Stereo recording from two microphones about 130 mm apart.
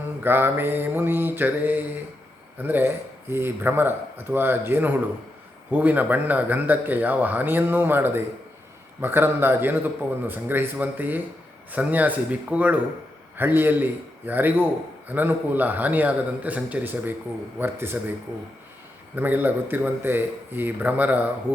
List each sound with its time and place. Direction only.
0.2 s a man's voice: 15° right (ahead or behind)
19.1 s a man's voice: 15° right (ahead or behind)